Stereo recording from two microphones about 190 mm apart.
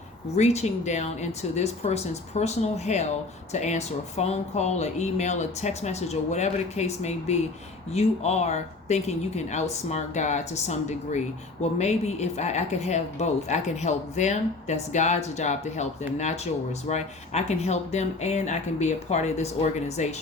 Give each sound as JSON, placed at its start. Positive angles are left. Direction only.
{"t": 0.3, "sound": "speech", "side_deg": 35}